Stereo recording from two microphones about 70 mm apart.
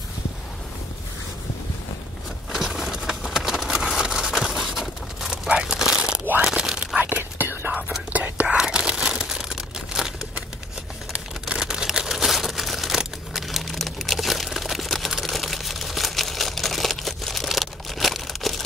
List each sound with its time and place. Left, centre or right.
2.5 s a sound: centre
6.4 s whispering: centre
7.0 s whispering: right; by 10.1 s centre
11.1 s crumpling: centre